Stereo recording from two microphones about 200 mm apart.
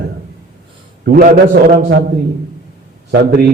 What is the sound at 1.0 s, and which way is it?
Speech, 45° right (ahead or behind).